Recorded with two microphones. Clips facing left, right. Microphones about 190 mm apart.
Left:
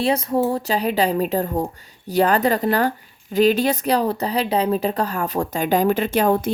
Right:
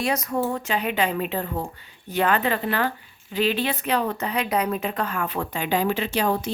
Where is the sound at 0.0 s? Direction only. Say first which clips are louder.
Left 5 dB; 30° left (ahead or behind).